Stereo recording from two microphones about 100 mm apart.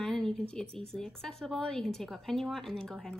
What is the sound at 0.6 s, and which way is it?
Speech, 70° right (ahead or behind).